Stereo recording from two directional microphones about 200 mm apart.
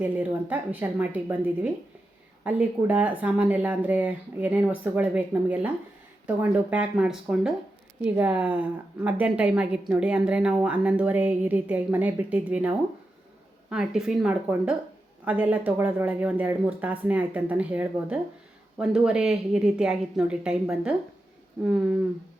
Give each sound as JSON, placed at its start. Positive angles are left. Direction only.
{"t": 0.0, "sound": "a woman's voice", "side_deg": -10}